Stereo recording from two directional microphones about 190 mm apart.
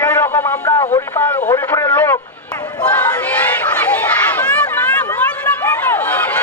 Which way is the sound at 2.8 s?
10° left (ahead or behind).